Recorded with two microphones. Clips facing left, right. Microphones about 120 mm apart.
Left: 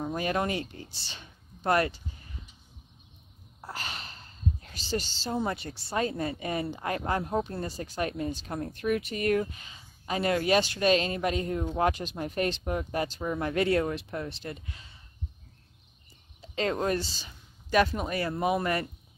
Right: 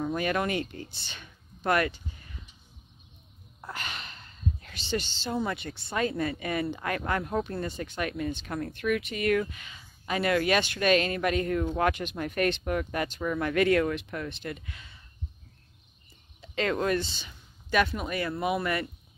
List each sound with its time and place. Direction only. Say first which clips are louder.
0.0 s speech: right 1 dB; 30° left (ahead or behind)
3.6 s sigh: even; 35° left (ahead or behind)
5.3 s speech: even; 30° left (ahead or behind)
16.3 s speech: right 1 dB; 30° left (ahead or behind)